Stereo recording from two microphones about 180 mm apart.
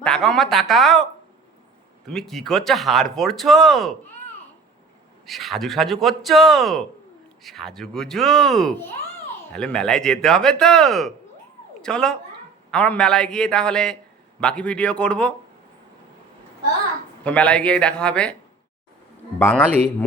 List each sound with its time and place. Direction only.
0.0 s speech: 5° left (ahead or behind)
2.0 s speech: centre (ahead or behind)
5.2 s speech: centre (ahead or behind)
17.2 s speech: 5° left (ahead or behind)
19.4 s speech: 10° left (ahead or behind)